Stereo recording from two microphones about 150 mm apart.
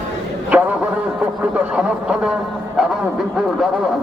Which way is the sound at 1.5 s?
5° right (ahead or behind).